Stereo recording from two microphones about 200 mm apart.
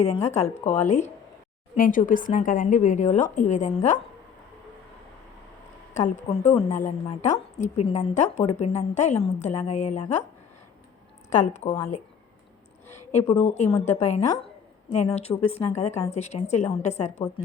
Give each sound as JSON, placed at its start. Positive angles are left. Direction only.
{"t": 0.3, "sound": "a woman's voice", "side_deg": 30}
{"t": 5.9, "sound": "a woman's voice", "side_deg": 35}
{"t": 11.3, "sound": "a woman's voice", "side_deg": 35}
{"t": 13.1, "sound": "a woman's voice", "side_deg": 30}